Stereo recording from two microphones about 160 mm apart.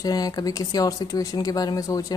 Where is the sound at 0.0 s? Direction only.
25° left (ahead or behind).